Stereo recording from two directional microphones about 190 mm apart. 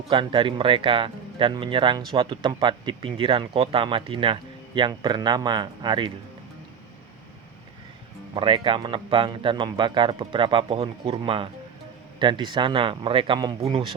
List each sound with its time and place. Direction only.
0.1 s speech: 25° right (ahead or behind)
8.4 s speech: 25° right (ahead or behind)